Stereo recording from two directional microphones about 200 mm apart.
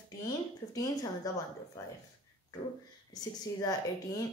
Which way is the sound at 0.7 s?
20° left (ahead or behind).